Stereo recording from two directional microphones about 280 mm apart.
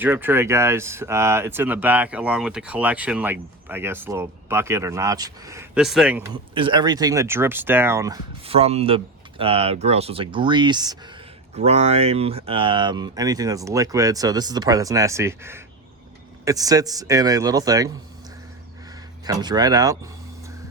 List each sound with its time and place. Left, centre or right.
0.0 s speech: centre
6.3 s speech: centre
19.2 s speech: centre